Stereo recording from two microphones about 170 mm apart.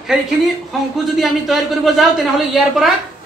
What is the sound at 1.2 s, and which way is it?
A woman's voice, centre (ahead or behind).